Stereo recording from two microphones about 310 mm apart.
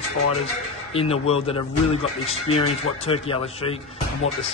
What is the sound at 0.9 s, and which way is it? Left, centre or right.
Speech, centre.